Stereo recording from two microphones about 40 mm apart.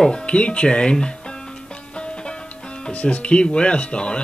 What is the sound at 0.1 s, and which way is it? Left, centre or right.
Speech, left.